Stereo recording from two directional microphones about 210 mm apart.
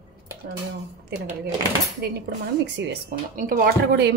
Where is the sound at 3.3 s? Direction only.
40° right (ahead or behind).